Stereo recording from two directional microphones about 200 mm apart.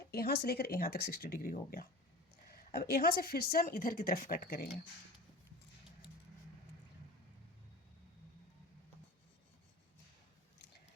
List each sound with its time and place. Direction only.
0.1 s a woman's voice: 50° left (ahead or behind)